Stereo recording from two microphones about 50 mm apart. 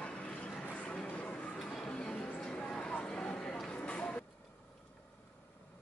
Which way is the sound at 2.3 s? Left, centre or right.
Left.